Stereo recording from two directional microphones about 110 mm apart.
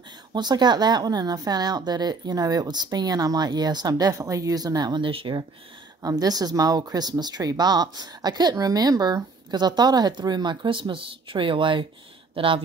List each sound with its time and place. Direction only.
0.3 s speech: 40° right (ahead or behind)
6.0 s speech: 35° right (ahead or behind); by 12.6 s 55° right (ahead or behind)